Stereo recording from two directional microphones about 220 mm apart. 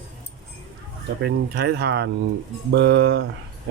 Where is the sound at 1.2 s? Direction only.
50° right (ahead or behind).